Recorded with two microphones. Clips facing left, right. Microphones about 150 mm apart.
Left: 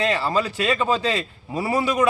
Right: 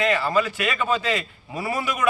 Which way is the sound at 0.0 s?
30° left (ahead or behind).